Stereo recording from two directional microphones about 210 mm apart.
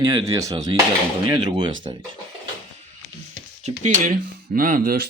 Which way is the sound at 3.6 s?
40° right (ahead or behind).